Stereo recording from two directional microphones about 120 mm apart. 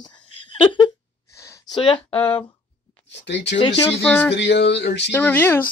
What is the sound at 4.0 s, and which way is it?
A woman's voice, 15° left (ahead or behind).